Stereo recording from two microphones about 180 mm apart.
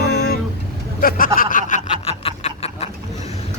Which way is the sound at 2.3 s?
35° left (ahead or behind).